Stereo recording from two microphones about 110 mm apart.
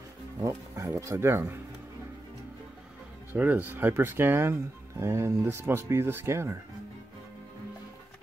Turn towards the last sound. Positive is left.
turn(degrees=-25)  # may be behind; listen again after turning